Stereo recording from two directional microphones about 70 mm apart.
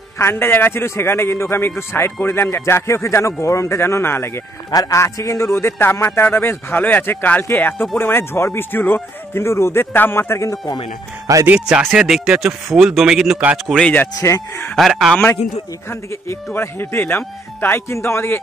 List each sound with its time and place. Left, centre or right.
0.2 s speech: left
4.6 s a man's voice: left
5.0 s speech: left
11.4 s speech: right
12.0 s speech: centre
13.7 s speech: centre
15.9 s speech: left